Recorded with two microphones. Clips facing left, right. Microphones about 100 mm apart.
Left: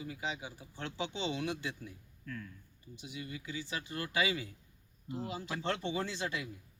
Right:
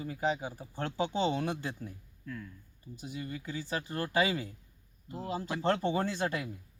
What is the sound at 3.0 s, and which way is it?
Speech, 40° right (ahead or behind).